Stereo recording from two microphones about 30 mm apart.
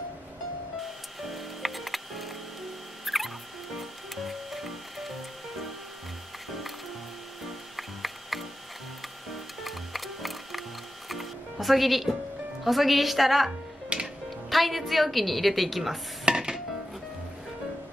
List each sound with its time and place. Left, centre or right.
0.8 s music: centre
7.4 s music: centre
12.6 s a woman's voice: centre
13.9 s music: right
14.5 s a woman's voice: centre
16.3 s dishes: right